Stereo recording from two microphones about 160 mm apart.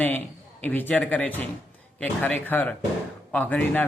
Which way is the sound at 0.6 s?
10° left (ahead or behind).